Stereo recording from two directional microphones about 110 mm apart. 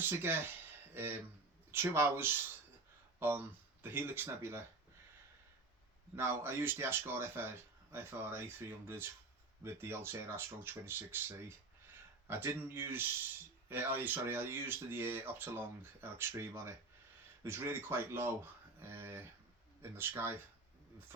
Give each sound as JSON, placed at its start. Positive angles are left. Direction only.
{"t": 0.0, "sound": "speech", "side_deg": -20}
{"t": 6.1, "sound": "speech", "side_deg": -20}